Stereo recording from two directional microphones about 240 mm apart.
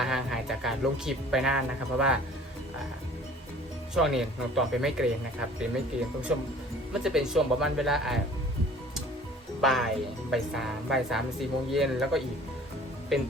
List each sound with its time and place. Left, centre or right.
0.0 s speech: centre
3.9 s speech: centre
9.6 s speech: centre